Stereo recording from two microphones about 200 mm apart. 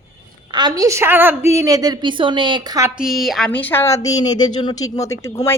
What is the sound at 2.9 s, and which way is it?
Speech, centre (ahead or behind).